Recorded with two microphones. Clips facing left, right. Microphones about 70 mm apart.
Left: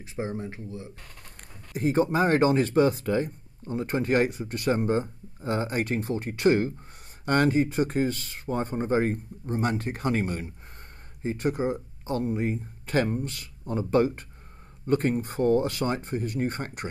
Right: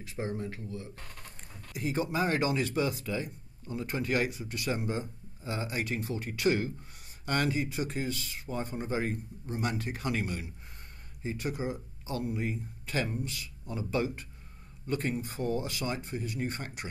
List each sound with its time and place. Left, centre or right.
0.0 s speech: left
1.7 s speech: left